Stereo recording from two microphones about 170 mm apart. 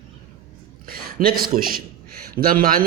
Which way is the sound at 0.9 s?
60° right (ahead or behind).